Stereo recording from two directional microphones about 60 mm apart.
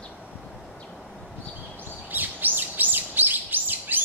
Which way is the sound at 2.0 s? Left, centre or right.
Right.